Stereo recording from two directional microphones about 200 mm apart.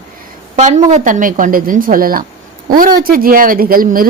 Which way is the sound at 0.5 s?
35° right (ahead or behind).